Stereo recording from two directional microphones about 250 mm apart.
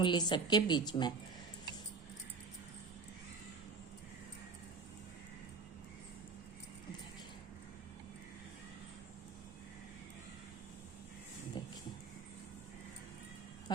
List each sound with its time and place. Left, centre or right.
0.0 s a woman's voice: centre
11.6 s music: centre
13.7 s a sound: centre